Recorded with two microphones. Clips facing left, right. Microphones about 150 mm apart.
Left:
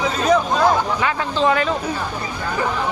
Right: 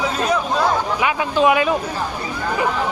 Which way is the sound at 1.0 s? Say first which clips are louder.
Right 2 dB; 15° right (ahead or behind).